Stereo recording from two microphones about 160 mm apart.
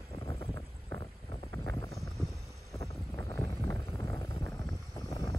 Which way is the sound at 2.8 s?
15° left (ahead or behind).